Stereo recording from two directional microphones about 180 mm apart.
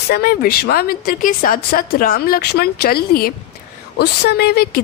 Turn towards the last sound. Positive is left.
turn(degrees=60)  # may be behind; listen again after turning